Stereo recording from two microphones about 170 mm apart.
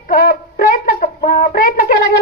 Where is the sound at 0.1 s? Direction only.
55° left (ahead or behind).